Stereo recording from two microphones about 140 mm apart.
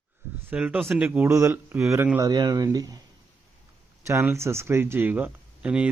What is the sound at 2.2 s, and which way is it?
Speech, 30° right (ahead or behind).